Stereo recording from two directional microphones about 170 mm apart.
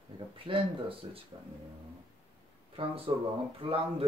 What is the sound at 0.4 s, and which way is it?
Speech, 30° right (ahead or behind).